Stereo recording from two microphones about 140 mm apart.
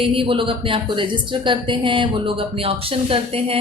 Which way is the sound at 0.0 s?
40° right (ahead or behind).